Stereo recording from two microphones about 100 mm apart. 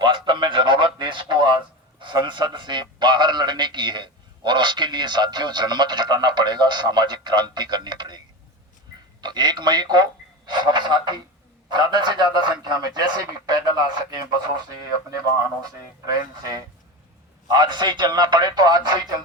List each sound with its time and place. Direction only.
0.0 s a sound: 50° right (ahead or behind)
2.0 s a man's voice: 50° right (ahead or behind)
9.2 s a man's voice: 45° right (ahead or behind)
16.0 s a man's voice: 40° right (ahead or behind)